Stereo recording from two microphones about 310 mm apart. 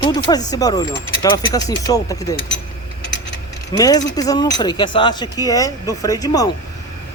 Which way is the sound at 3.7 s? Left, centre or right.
Centre.